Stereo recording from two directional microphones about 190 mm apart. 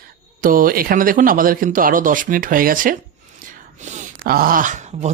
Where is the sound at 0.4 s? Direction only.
50° right (ahead or behind).